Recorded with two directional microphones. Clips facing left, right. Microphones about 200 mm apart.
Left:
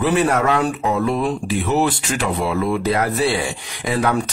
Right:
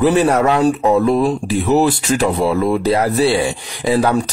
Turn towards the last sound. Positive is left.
turn(degrees=-30)  # may be behind; listen again after turning